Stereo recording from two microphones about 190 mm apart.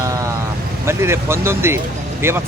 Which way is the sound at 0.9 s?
15° right (ahead or behind).